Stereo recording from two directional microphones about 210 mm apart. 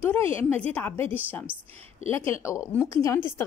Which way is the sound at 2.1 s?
10° left (ahead or behind).